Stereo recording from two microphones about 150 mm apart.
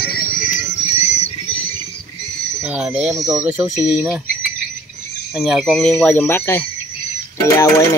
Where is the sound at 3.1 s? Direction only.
20° right (ahead or behind).